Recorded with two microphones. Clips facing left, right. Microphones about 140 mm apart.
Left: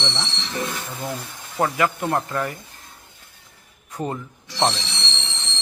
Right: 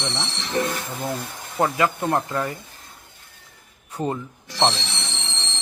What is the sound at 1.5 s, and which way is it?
Speech, 20° right (ahead or behind).